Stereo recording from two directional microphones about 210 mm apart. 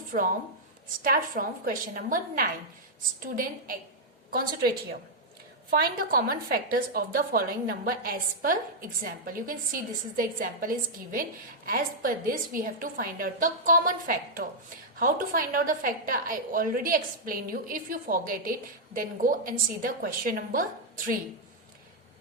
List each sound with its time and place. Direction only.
1.0 s a woman's voice: 40° right (ahead or behind)